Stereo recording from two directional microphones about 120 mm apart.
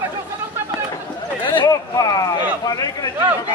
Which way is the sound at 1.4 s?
40° left (ahead or behind).